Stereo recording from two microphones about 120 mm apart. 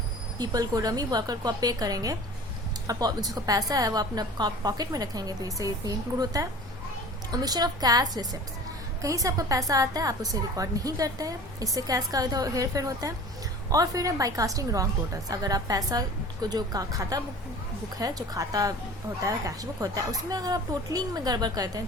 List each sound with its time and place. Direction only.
0.3 s a woman's voice: 35° right (ahead or behind)